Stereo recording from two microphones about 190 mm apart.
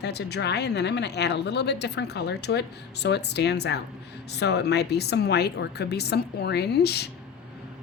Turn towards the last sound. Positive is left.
turn(degrees=60)  # may be behind; listen again after turning